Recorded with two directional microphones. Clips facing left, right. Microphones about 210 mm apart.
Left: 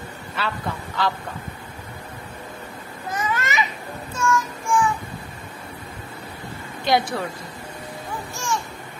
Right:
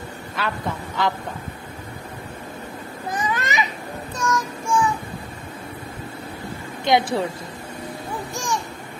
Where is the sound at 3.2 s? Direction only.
15° right (ahead or behind).